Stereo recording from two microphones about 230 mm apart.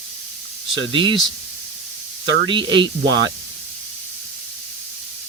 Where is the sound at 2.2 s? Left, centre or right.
Right.